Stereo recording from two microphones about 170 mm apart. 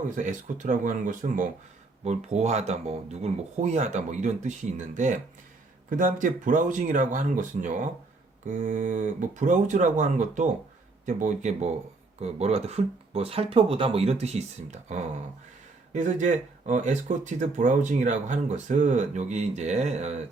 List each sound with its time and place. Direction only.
0.2 s speech: 50° right (ahead or behind)